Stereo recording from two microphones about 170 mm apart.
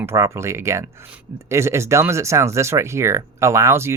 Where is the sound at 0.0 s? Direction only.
15° right (ahead or behind).